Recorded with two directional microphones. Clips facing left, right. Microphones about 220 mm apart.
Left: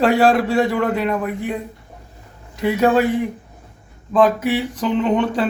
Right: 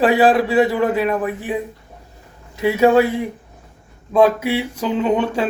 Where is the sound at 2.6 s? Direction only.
5° right (ahead or behind).